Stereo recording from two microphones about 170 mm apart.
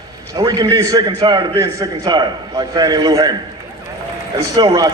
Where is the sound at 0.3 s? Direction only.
25° right (ahead or behind).